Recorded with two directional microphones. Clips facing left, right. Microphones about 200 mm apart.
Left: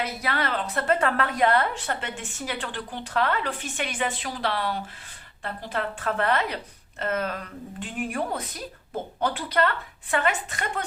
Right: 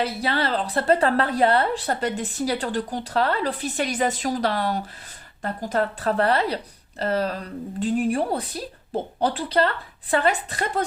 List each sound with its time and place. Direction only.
0.0 s a woman's voice: 30° right (ahead or behind)